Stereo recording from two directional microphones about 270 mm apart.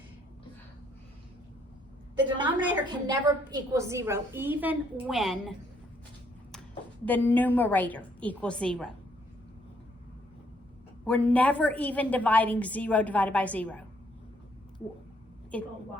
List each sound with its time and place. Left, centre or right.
2.2 s a sound: centre
2.9 s a woman's voice: centre
7.0 s a woman's voice: centre
11.0 s a woman's voice: centre